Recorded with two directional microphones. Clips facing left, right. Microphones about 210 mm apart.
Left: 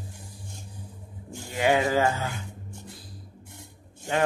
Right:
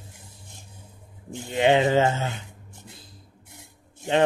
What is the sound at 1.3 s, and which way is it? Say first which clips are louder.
Speech: right 4 dB; 25° right (ahead or behind).